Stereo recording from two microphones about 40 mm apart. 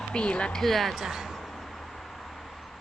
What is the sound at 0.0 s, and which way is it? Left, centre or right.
Speech, left.